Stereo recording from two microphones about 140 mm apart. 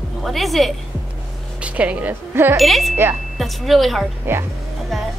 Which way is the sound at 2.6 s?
Centre (ahead or behind).